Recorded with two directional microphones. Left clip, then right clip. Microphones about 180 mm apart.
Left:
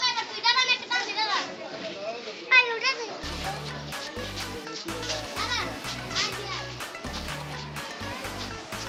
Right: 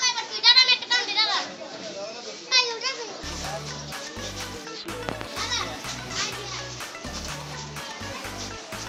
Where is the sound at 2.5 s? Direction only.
15° left (ahead or behind).